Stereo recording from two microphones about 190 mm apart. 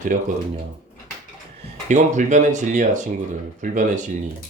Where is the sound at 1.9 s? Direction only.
40° right (ahead or behind).